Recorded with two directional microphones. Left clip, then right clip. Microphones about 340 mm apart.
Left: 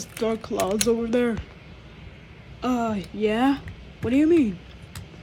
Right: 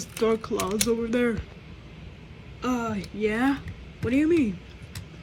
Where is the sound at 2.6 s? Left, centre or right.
Centre.